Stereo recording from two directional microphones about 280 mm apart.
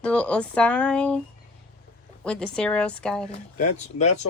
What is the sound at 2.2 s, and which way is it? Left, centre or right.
A woman's voice, centre.